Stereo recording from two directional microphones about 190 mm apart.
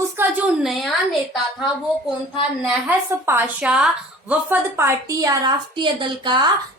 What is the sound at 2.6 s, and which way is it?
A woman's voice, 5° right (ahead or behind).